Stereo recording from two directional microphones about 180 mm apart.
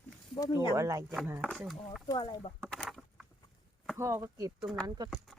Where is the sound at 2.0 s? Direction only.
25° left (ahead or behind).